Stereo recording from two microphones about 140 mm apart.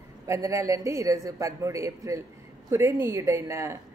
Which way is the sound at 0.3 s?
20° right (ahead or behind).